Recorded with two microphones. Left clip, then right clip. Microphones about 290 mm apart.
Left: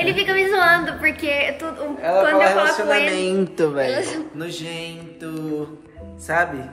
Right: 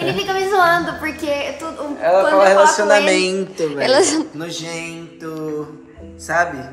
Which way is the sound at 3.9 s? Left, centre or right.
Right.